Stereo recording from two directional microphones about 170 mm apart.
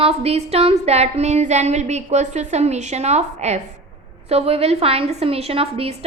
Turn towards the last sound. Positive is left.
turn(degrees=-35)  # may be behind; listen again after turning